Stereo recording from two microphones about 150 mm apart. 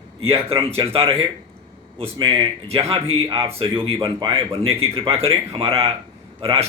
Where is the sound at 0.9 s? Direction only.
40° right (ahead or behind).